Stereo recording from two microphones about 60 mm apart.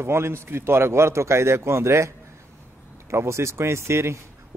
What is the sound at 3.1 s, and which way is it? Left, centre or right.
Speech, right.